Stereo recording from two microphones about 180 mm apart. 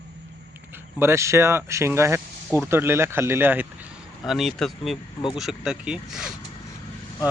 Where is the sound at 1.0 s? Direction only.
15° right (ahead or behind).